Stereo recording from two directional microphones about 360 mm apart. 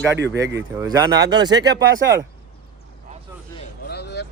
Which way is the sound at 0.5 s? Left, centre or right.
Centre.